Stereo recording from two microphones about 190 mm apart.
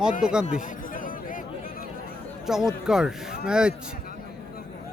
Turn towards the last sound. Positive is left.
turn(degrees=-5)  # may be behind; listen again after turning